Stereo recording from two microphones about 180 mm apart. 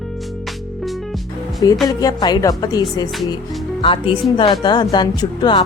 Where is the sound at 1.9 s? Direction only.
20° left (ahead or behind).